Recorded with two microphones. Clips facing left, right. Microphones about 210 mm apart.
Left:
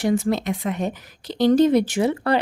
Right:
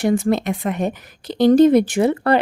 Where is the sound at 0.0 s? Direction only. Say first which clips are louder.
Right 3 dB; 55° right (ahead or behind).